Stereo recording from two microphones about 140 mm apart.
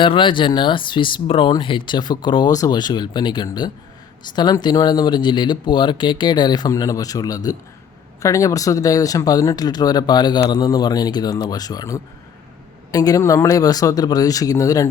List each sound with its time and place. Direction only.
0.0 s speech: 35° left (ahead or behind)